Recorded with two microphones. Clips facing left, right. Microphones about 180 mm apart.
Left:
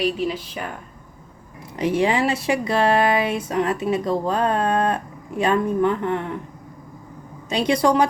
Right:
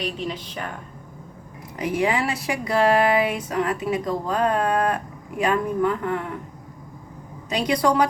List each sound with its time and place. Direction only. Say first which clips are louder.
0.0 s speech: left 6 dB; 5° left (ahead or behind)
1.8 s speech: left 3 dB; 30° left (ahead or behind)
7.5 s speech: left 2 dB; 25° left (ahead or behind)